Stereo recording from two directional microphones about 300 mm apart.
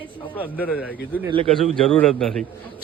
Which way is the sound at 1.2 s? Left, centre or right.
Centre.